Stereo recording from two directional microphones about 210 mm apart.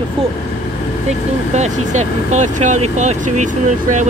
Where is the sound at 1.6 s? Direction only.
35° right (ahead or behind).